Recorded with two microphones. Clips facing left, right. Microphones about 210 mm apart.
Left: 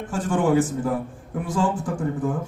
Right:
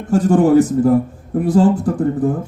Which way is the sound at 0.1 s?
40° right (ahead or behind).